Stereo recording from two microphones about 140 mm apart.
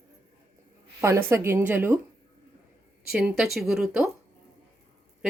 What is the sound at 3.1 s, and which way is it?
Speech, 5° right (ahead or behind).